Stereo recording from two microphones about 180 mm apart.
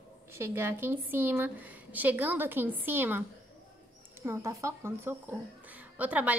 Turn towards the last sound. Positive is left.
turn(degrees=-10)  # may be behind; listen again after turning